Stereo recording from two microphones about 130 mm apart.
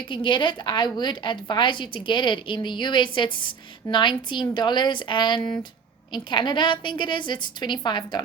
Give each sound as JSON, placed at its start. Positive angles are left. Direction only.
{"t": 0.1, "sound": "a woman's voice", "side_deg": 40}